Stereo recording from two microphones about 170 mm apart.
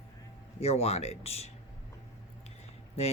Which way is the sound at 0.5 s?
35° left (ahead or behind).